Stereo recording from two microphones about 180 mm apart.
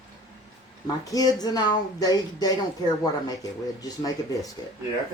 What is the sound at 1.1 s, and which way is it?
Speech, 20° left (ahead or behind).